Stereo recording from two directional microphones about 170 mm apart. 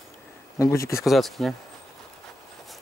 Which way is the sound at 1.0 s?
Centre (ahead or behind).